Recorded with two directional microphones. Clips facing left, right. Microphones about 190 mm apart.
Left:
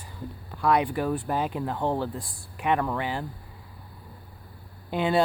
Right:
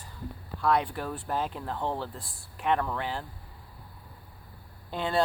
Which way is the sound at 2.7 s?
5° left (ahead or behind).